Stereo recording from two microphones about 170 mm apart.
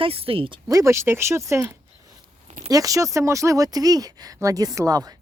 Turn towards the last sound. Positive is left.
turn(degrees=-20)  # may be behind; listen again after turning